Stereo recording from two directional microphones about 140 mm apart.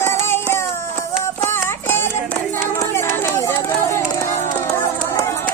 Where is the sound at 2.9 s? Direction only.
20° left (ahead or behind).